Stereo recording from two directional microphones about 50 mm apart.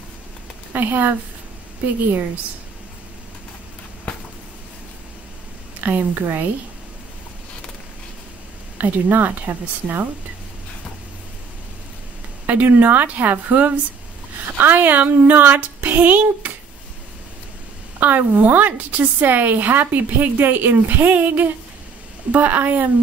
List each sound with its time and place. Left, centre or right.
0.7 s a woman's voice: right
5.8 s a woman's voice: right
8.7 s a woman's voice: right
12.4 s a woman's voice: right
17.9 s a woman's voice: right